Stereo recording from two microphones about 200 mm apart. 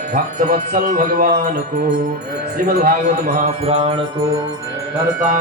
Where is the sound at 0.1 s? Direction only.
45° right (ahead or behind).